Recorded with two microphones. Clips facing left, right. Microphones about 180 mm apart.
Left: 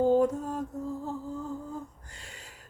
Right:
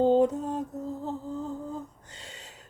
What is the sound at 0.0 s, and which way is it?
Mantra, 20° right (ahead or behind).